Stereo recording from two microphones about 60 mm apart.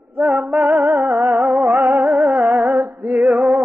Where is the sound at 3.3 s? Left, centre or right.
Centre.